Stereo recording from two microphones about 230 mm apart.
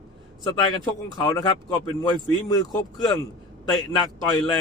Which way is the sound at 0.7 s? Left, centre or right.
Centre.